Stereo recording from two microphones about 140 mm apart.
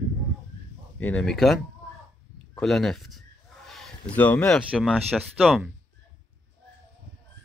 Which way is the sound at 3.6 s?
Centre (ahead or behind).